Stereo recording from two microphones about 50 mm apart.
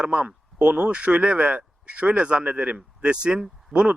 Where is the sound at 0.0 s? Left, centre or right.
Right.